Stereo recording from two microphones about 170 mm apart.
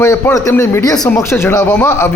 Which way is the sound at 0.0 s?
15° left (ahead or behind).